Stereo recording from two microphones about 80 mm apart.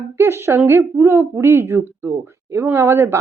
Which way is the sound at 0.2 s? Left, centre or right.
Right.